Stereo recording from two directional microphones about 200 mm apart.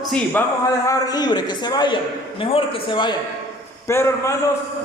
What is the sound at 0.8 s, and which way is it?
Speech, 20° left (ahead or behind).